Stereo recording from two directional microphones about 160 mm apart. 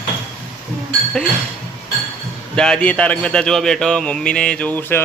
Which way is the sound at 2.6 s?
5° left (ahead or behind).